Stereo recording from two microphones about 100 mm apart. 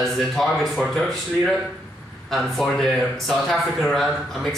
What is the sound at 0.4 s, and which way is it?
Speech, centre (ahead or behind).